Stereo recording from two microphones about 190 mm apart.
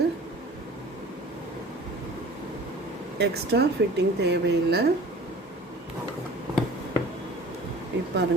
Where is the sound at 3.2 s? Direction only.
60° right (ahead or behind).